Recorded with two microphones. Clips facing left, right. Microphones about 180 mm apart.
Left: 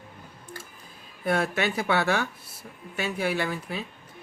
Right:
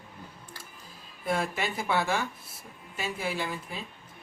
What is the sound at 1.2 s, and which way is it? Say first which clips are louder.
Speech: left 4 dB; 65° left (ahead or behind).